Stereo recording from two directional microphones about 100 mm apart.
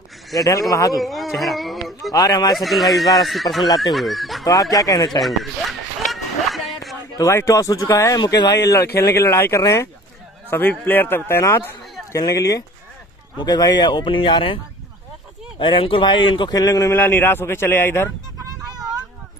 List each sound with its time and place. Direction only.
0.4 s speech: 35° left (ahead or behind)
0.9 s speech: centre (ahead or behind)
2.1 s speech: 40° left (ahead or behind)
2.5 s speech: centre (ahead or behind)
4.5 s speech: 35° left (ahead or behind)
5.2 s a sound: centre (ahead or behind)
7.2 s speech: 30° left (ahead or behind)
8.2 s speech: 50° left (ahead or behind)
8.6 s speech: 25° left (ahead or behind)
12.1 s speech: 35° left (ahead or behind); by 14.6 s 60° left (ahead or behind)
15.6 s speech: 60° left (ahead or behind); by 16.9 s 35° left (ahead or behind)
16.9 s speech: 20° left (ahead or behind)